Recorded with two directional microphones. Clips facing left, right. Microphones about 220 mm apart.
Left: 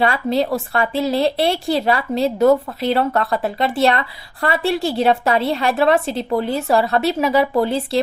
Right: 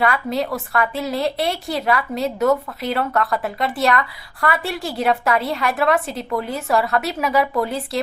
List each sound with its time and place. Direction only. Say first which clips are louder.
0.0 s a woman's voice: left 3 dB; 30° left (ahead or behind)